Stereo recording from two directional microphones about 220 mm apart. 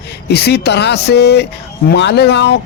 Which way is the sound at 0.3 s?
45° left (ahead or behind).